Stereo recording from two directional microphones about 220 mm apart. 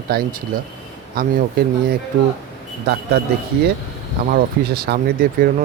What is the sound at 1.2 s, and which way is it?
Speech, 40° right (ahead or behind).